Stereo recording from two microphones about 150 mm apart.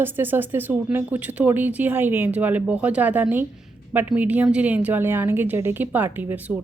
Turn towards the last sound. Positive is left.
turn(degrees=-15)  # may be behind; listen again after turning